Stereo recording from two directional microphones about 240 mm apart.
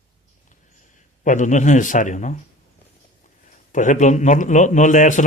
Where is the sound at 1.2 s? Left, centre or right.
Left.